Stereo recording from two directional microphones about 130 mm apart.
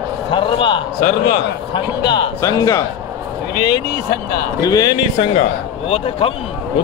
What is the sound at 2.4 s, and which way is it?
Speech, 25° left (ahead or behind).